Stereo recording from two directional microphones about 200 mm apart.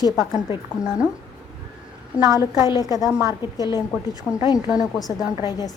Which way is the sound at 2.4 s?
20° left (ahead or behind).